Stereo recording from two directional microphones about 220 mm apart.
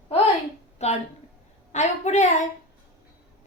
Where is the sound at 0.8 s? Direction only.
30° left (ahead or behind).